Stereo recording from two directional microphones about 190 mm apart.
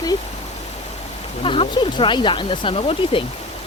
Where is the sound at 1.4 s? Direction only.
25° left (ahead or behind).